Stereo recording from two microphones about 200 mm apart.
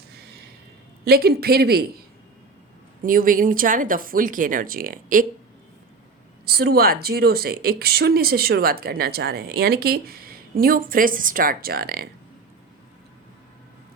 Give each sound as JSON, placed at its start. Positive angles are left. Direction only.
{"t": 1.0, "sound": "speech", "side_deg": -50}
{"t": 3.0, "sound": "speech", "side_deg": -45}
{"t": 6.4, "sound": "speech", "side_deg": -50}